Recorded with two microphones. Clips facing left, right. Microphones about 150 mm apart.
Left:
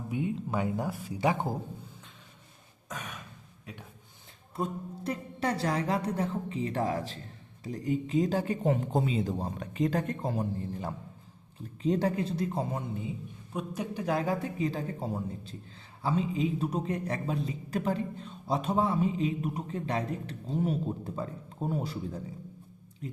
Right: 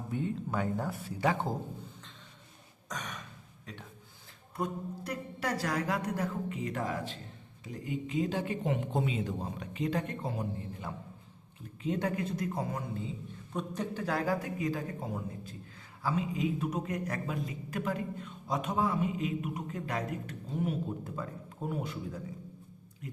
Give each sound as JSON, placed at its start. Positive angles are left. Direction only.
{"t": 0.1, "sound": "speech", "side_deg": 10}
{"t": 2.9, "sound": "gasp", "side_deg": 10}
{"t": 4.5, "sound": "speech", "side_deg": 25}
{"t": 23.0, "sound": "a sound", "side_deg": 30}